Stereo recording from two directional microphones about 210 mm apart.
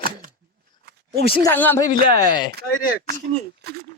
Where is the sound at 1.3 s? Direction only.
15° left (ahead or behind).